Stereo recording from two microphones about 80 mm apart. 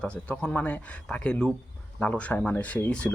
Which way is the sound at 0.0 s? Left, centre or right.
Centre.